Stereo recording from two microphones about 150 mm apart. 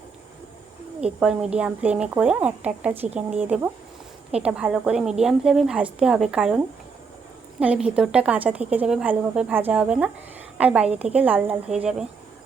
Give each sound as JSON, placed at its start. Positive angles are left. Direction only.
{"t": 1.0, "sound": "a woman's voice", "side_deg": -5}